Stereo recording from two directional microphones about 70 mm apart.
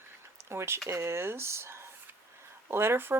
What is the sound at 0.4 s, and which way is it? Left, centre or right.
Speech, right.